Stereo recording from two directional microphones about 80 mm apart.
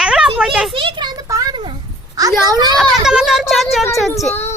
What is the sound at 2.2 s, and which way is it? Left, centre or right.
Speech, right.